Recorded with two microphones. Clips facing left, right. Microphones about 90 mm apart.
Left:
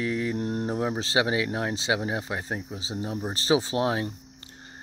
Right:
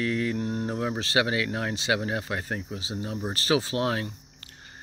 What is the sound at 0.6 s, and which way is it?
Speech, 25° left (ahead or behind).